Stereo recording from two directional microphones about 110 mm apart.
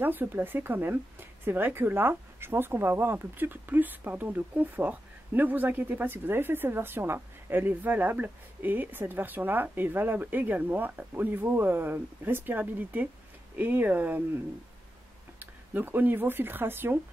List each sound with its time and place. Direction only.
0.0 s speech: 20° right (ahead or behind)
15.3 s speech: 20° right (ahead or behind)